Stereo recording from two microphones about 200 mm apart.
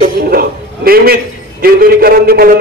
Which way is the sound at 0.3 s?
50° right (ahead or behind).